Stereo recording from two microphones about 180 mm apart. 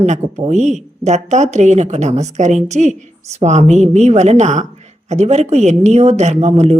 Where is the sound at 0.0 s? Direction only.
40° right (ahead or behind).